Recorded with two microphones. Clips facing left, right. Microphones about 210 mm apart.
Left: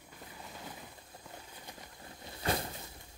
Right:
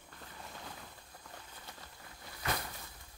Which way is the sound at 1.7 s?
15° left (ahead or behind).